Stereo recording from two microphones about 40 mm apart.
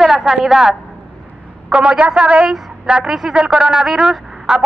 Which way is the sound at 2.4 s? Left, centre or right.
Centre.